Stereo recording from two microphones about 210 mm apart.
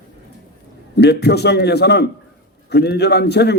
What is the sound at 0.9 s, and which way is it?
A man's voice, 50° left (ahead or behind).